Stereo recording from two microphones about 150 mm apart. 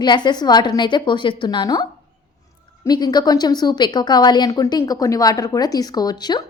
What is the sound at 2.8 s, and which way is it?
A woman's voice, 25° left (ahead or behind).